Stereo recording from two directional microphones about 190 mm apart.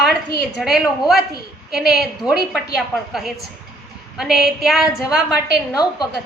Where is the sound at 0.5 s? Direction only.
Centre (ahead or behind).